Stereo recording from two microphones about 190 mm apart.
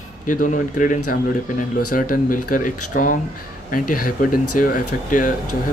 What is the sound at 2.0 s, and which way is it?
Speech, 45° left (ahead or behind).